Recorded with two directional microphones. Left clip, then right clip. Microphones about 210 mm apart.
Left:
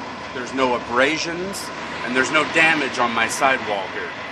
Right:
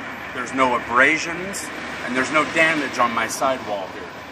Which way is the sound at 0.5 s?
40° left (ahead or behind).